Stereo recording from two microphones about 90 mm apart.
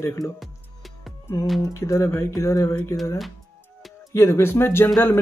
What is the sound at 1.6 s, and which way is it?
Music, 35° left (ahead or behind).